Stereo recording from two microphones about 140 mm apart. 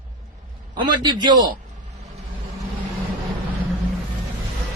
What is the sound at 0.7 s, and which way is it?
Speech, 30° right (ahead or behind).